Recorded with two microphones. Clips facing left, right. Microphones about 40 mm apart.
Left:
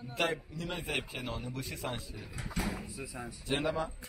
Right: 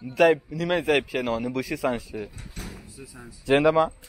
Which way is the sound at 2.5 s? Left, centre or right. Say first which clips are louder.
Left 9 dB; centre.